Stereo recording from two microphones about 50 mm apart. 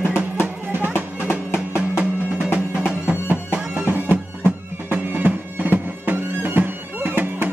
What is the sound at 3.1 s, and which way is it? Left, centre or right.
Music, right.